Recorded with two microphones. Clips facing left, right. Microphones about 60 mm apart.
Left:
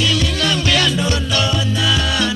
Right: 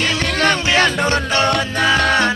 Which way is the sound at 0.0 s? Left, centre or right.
Right.